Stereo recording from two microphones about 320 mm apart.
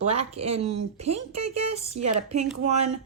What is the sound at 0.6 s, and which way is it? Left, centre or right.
Speech, right.